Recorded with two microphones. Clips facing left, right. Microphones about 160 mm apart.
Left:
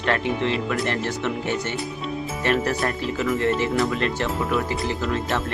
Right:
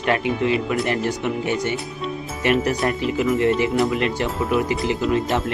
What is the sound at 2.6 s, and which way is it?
Speech, 15° right (ahead or behind).